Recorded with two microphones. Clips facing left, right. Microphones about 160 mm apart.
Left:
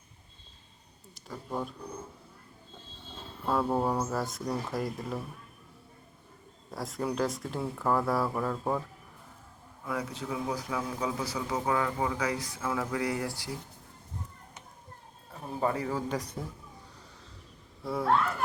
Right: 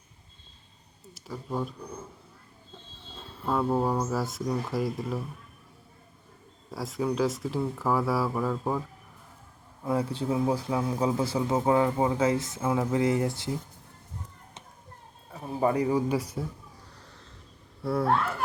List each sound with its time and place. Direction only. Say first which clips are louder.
1.1 s speech: right 3 dB; 5° right (ahead or behind)
3.4 s speech: right 2 dB; centre (ahead or behind)
6.7 s speech: right 4 dB; centre (ahead or behind)
9.8 s a man's voice: right 7 dB; 30° right (ahead or behind)
15.6 s speech: right 6 dB; 15° right (ahead or behind)
17.8 s speech: right 5 dB; centre (ahead or behind)